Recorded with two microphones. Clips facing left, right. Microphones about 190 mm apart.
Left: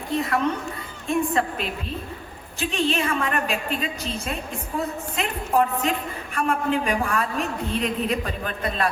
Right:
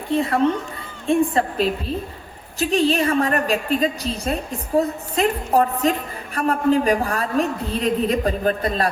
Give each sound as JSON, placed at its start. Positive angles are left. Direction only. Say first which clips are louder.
{"t": 0.1, "sound": "a woman's voice", "louder": "right 5 dB", "side_deg": -30}